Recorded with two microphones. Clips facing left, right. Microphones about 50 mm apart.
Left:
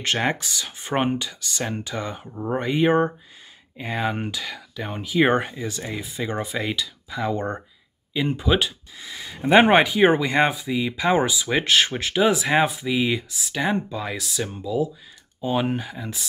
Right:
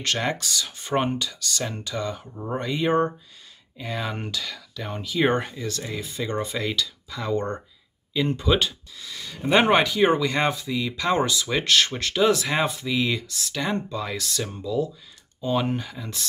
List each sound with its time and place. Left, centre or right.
0.0 s speech: left
8.9 s speech: left